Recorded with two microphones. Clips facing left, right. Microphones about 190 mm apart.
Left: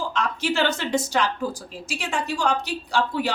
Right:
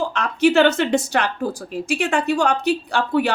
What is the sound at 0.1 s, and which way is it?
Speech, 65° right (ahead or behind).